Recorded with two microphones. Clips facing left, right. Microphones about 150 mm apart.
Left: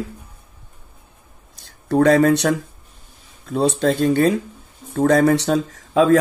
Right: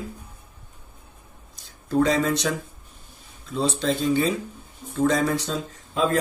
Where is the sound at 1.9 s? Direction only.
65° left (ahead or behind).